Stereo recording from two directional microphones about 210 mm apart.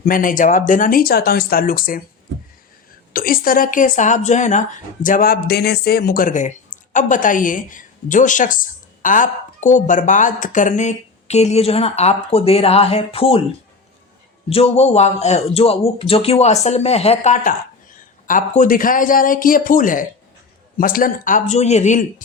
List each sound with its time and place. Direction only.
0.0 s speech: 40° left (ahead or behind)
3.1 s a woman's voice: 45° left (ahead or behind); by 13.4 s 25° left (ahead or behind)
14.5 s a woman's voice: 30° left (ahead or behind)